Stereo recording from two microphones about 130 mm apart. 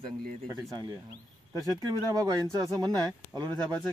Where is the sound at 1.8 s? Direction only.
30° right (ahead or behind).